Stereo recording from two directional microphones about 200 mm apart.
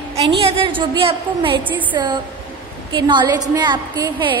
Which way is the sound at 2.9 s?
25° right (ahead or behind).